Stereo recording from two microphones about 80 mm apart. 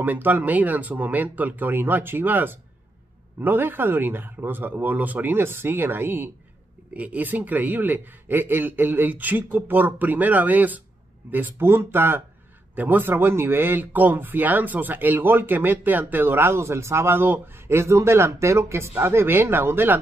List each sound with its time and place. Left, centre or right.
0.0 s speech: right